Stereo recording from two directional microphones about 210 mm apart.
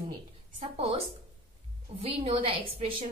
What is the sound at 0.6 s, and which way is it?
Speech, 30° right (ahead or behind).